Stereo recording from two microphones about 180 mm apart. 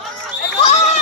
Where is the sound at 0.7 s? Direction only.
40° left (ahead or behind).